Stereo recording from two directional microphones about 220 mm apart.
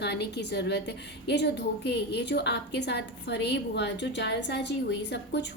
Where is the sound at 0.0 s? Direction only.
50° left (ahead or behind).